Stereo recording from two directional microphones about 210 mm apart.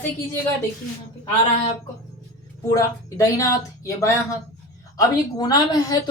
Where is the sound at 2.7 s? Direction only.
15° left (ahead or behind).